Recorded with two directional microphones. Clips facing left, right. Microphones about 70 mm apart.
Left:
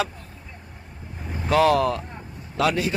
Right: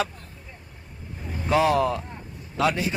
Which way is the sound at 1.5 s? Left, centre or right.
Centre.